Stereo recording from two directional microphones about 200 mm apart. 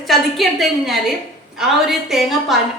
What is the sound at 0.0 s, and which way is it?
A woman's voice, centre (ahead or behind).